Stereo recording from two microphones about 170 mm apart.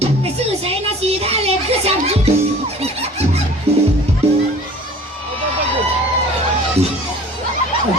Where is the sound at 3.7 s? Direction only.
35° right (ahead or behind).